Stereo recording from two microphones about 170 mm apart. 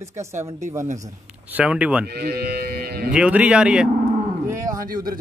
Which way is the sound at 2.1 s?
65° right (ahead or behind).